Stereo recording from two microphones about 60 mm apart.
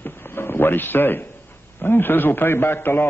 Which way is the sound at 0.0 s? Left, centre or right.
Left.